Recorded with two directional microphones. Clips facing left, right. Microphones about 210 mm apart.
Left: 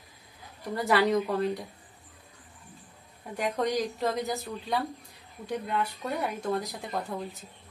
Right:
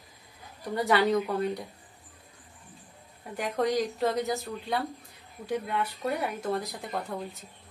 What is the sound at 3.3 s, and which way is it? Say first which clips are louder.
A woman's voice: right 1 dB; centre (ahead or behind).